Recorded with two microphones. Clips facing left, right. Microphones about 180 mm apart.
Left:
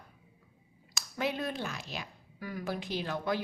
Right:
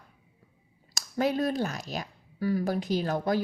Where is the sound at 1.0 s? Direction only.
40° right (ahead or behind).